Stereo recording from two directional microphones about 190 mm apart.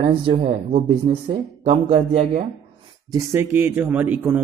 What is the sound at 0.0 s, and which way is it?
Speech, 30° right (ahead or behind).